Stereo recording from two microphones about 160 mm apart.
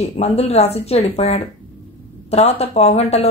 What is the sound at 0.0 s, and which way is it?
A woman's voice, 40° left (ahead or behind).